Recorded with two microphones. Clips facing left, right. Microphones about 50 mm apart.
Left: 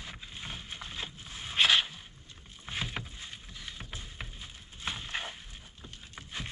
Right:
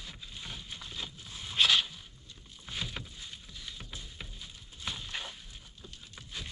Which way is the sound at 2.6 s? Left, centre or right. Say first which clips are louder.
Left 3 dB; left.